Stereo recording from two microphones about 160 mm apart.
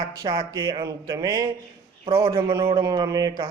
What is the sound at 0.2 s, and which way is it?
Speech, 25° right (ahead or behind).